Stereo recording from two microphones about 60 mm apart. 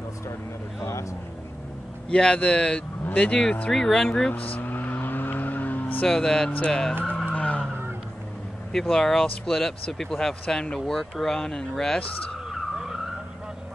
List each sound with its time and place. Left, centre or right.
2.0 s speech: centre
4.3 s vehicle: left
6.0 s speech: centre
7.2 s vehicle: left
8.7 s speech: centre
12.4 s skidding: centre